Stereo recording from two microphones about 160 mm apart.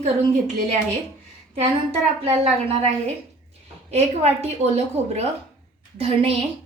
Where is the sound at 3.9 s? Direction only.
45° right (ahead or behind).